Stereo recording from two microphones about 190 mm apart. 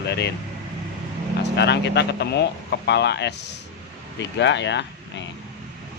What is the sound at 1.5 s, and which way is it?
Speech, 65° left (ahead or behind).